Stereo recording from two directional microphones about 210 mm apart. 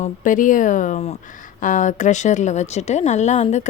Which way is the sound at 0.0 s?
40° left (ahead or behind).